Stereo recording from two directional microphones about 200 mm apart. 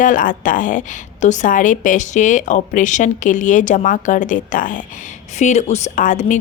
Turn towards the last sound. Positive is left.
turn(degrees=40)  # may be behind; listen again after turning